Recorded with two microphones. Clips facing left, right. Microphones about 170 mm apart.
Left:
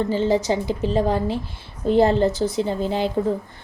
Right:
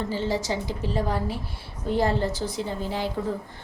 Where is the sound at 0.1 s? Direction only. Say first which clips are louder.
Left 7 dB; 20° left (ahead or behind).